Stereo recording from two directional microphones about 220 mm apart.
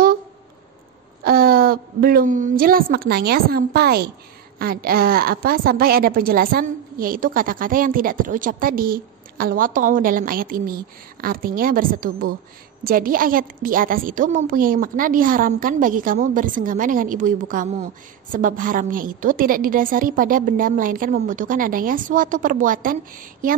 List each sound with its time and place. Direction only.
1.2 s a woman's voice: 40° right (ahead or behind)